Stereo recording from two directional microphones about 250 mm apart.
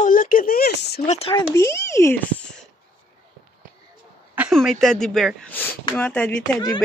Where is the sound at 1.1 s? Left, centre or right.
Left.